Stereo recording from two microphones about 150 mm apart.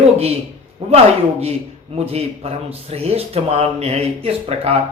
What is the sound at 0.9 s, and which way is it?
Speech, 45° right (ahead or behind).